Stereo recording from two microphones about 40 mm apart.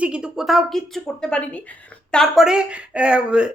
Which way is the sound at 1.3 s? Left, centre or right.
Left.